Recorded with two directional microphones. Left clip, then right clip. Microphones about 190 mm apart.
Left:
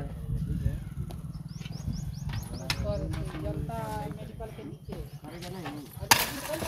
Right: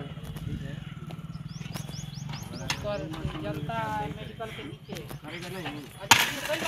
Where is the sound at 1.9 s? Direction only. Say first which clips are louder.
Right 2 dB; 65° left (ahead or behind).